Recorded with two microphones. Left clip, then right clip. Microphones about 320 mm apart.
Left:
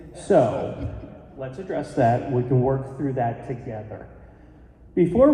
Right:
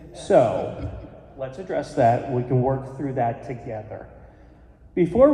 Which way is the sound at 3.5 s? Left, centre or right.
Right.